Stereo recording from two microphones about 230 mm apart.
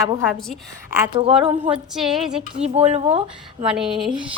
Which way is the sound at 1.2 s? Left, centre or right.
Right.